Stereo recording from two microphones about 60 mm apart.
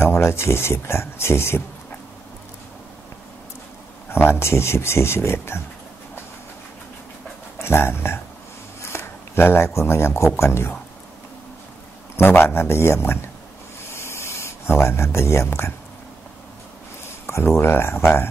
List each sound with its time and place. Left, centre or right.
0.0 s speech: left
4.4 s speech: left
7.6 s speech: left
8.8 s a sound: left
9.8 s speech: left
12.2 s speech: left
13.9 s a sound: left
17.6 s speech: left